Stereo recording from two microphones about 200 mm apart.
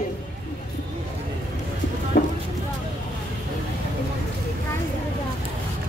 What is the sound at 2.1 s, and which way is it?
Vehicle, 45° left (ahead or behind).